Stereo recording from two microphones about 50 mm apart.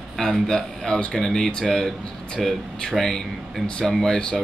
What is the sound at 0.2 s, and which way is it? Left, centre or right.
Speech, centre.